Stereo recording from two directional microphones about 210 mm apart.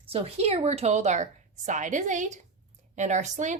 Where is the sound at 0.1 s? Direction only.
30° right (ahead or behind).